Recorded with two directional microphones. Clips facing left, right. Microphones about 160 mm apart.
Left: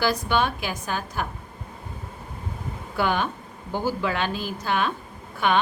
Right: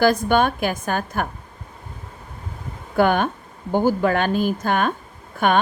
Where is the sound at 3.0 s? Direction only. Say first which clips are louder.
Right 7 dB; 50° right (ahead or behind).